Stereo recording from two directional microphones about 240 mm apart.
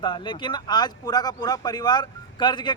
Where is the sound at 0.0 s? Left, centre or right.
Centre.